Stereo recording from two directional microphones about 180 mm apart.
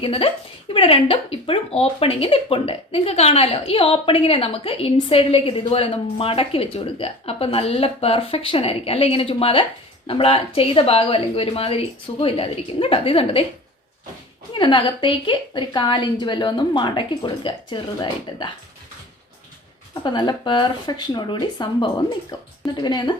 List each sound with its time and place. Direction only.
0.0 s speech: 30° left (ahead or behind)
14.5 s a woman's voice: 25° left (ahead or behind)
19.9 s a woman's voice: 25° left (ahead or behind)